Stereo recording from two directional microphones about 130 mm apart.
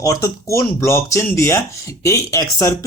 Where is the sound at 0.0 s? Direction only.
25° left (ahead or behind).